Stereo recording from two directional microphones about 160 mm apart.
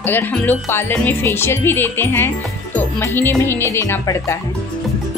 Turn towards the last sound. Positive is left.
turn(degrees=15)  # may be behind; listen again after turning